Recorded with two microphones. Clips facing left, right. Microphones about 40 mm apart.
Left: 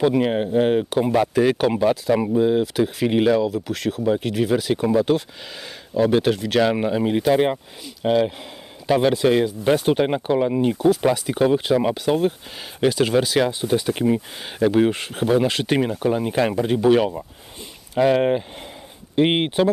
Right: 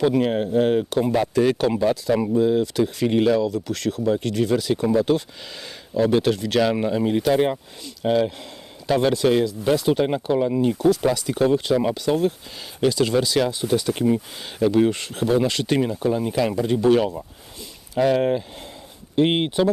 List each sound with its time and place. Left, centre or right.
0.0 s speech: centre
6.7 s speech: centre
9.4 s speech: left
15.9 s speech: left
17.9 s speech: left